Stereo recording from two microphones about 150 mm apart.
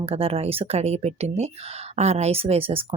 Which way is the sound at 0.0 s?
40° right (ahead or behind).